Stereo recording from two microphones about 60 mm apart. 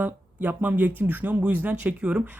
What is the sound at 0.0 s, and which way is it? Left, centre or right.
A woman's voice, right.